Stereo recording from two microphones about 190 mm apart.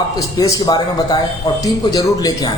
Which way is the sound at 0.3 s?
20° left (ahead or behind).